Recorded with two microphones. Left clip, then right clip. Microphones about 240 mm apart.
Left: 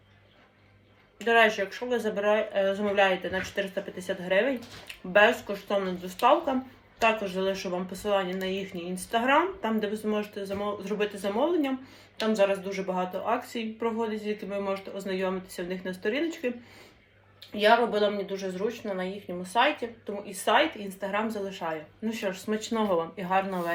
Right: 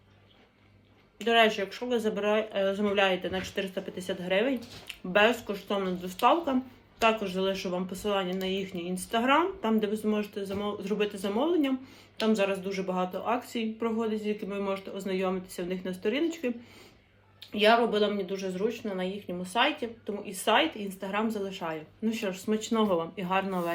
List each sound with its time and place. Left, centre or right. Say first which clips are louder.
1.2 s speech: left 2 dB; centre
3.1 s speech: left 2 dB; centre
3.6 s speech: left 2 dB; centre
17.5 s speech: left 1 dB; centre